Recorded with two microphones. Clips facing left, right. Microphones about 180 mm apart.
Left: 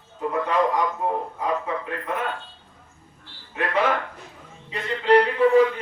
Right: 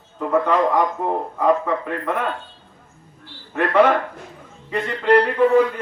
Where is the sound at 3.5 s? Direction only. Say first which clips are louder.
Right 7 dB; 60° right (ahead or behind).